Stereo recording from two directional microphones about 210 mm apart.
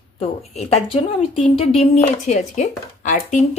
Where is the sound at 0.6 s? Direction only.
30° left (ahead or behind).